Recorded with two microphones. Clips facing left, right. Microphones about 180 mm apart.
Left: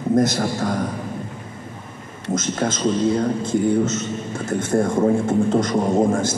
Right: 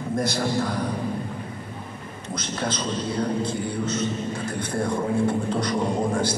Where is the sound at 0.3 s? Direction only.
45° left (ahead or behind).